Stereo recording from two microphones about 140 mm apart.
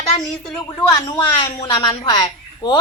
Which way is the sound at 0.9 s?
25° left (ahead or behind).